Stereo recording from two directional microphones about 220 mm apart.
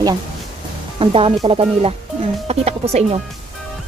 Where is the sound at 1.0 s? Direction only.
25° right (ahead or behind).